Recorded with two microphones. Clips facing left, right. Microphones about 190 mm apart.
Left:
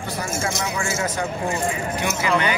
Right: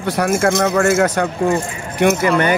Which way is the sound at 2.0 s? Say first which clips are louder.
Right 9 dB; 50° right (ahead or behind).